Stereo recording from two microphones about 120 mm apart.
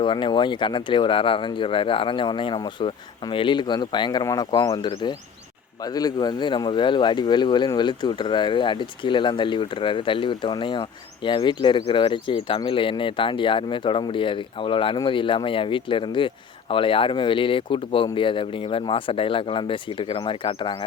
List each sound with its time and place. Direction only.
0.0 s speech: 40° left (ahead or behind)